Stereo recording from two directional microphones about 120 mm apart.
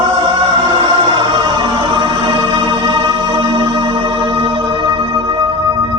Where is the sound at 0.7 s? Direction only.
40° right (ahead or behind).